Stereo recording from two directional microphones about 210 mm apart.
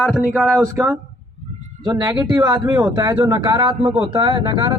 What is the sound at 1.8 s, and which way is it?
Speech, 15° right (ahead or behind).